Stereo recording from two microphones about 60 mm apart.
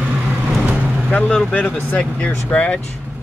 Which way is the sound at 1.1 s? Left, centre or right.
Left.